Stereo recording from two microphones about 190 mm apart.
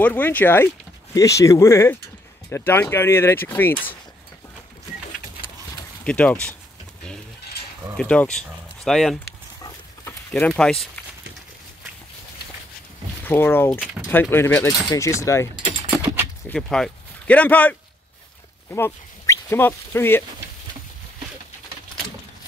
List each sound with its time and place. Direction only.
0.0 s speech: 10° left (ahead or behind)
6.0 s speech: 5° left (ahead or behind)
8.0 s speech: 5° left (ahead or behind)
9.6 s livestock: 15° left (ahead or behind)
10.5 s speech: centre (ahead or behind)
13.2 s speech: 10° left (ahead or behind)
14.0 s speech: 10° right (ahead or behind)
14.3 s speech: 10° left (ahead or behind)
16.4 s speech: 5° left (ahead or behind)
18.7 s dog: 10° left (ahead or behind)
19.5 s speech: 10° left (ahead or behind)